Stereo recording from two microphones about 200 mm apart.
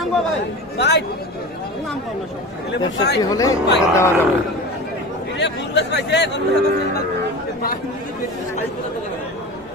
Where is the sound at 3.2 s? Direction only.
15° left (ahead or behind).